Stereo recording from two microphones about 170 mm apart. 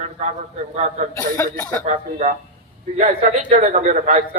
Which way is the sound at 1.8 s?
45° right (ahead or behind).